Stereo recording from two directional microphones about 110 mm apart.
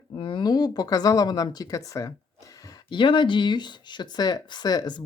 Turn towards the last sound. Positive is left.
turn(degrees=40)  # may be behind; listen again after turning